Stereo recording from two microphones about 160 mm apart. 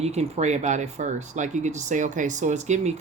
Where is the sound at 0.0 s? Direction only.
40° right (ahead or behind).